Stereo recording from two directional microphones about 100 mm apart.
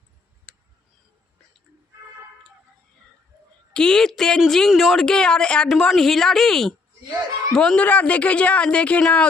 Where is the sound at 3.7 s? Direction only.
10° left (ahead or behind).